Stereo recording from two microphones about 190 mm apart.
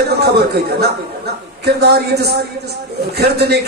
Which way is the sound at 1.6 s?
60° right (ahead or behind).